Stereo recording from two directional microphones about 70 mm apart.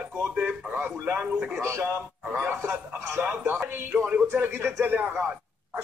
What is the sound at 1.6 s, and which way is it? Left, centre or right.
Speech, right.